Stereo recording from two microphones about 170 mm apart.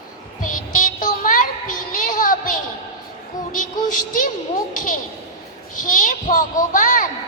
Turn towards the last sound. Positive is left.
turn(degrees=50)  # may be behind; listen again after turning